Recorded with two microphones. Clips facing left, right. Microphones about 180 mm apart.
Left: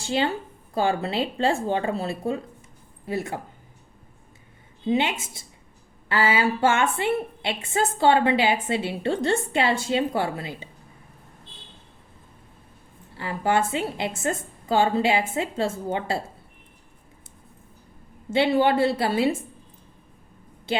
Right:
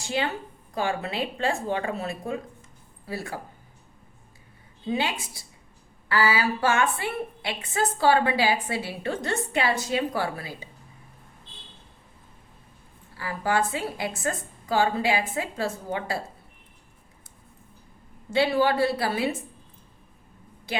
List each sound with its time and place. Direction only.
0.0 s a woman's voice: 30° left (ahead or behind)
4.9 s a woman's voice: 25° left (ahead or behind)
13.1 s a woman's voice: 25° left (ahead or behind)
18.3 s a woman's voice: 25° left (ahead or behind)